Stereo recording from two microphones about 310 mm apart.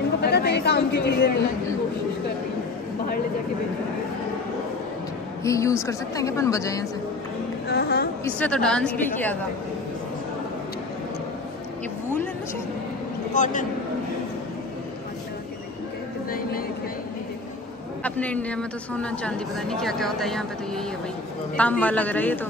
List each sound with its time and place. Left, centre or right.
0.2 s chatter: left
5.4 s a woman's voice: centre
7.6 s a sound: left
8.4 s speech: centre
13.3 s a man's voice: left
18.0 s speech: centre